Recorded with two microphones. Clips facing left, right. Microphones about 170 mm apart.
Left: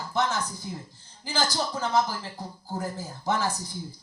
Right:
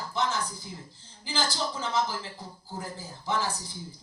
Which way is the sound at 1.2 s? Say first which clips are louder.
Left 3 dB; 45° left (ahead or behind).